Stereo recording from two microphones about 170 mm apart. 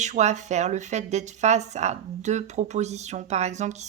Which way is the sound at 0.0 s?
45° right (ahead or behind).